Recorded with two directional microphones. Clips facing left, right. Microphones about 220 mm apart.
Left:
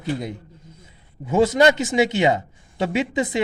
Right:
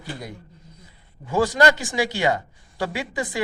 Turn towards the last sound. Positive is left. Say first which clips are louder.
# left 6 dB
turn(degrees=20)  # may be behind; listen again after turning